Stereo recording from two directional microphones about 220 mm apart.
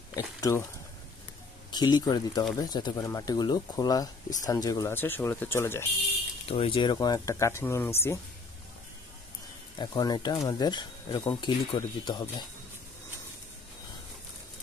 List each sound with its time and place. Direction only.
0.1 s speech: 15° left (ahead or behind)
1.7 s speech: 20° left (ahead or behind)
6.4 s speech: 25° left (ahead or behind)
9.8 s speech: 20° left (ahead or behind)